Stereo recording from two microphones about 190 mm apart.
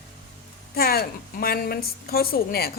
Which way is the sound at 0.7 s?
55° left (ahead or behind).